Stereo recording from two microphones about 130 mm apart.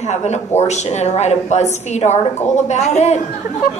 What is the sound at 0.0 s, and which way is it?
A woman's voice, 60° left (ahead or behind).